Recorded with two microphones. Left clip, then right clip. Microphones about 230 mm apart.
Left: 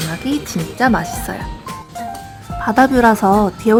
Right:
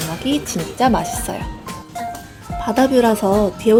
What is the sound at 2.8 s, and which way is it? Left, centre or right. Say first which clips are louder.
Speech: even; left.